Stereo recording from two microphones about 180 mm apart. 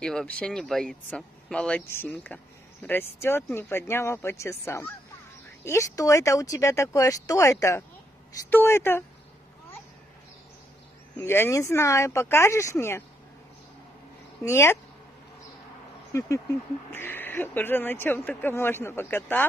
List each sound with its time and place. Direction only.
0.0 s speech: 5° left (ahead or behind)
11.1 s speech: 15° left (ahead or behind)
14.4 s speech: 15° left (ahead or behind)
16.1 s speech: 15° left (ahead or behind)